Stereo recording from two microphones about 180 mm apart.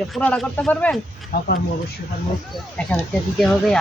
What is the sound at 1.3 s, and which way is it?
Speech, 55° left (ahead or behind).